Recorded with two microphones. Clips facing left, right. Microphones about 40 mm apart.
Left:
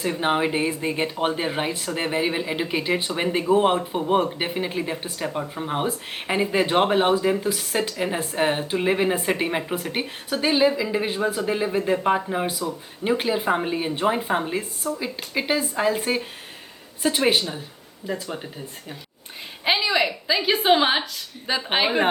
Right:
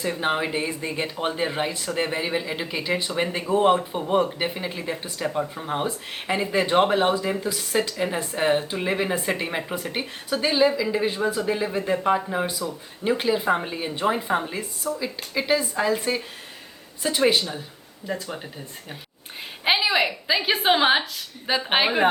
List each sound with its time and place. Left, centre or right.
0.0 s speech: centre
7.1 s speech: centre
16.0 s speech: left
18.0 s a woman's voice: centre